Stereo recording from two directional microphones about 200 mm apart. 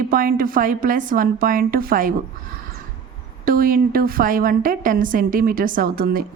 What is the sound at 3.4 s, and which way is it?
A woman's voice, 45° right (ahead or behind).